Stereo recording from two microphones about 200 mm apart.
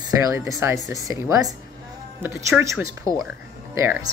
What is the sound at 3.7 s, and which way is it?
Speech, 15° right (ahead or behind).